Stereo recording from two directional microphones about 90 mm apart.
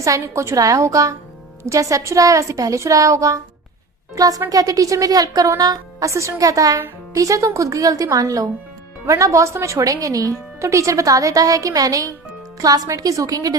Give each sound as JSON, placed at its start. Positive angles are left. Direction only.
{"t": 0.0, "sound": "speech", "side_deg": -35}